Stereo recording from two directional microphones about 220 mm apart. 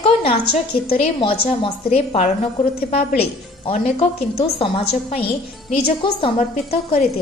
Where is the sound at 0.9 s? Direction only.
25° left (ahead or behind).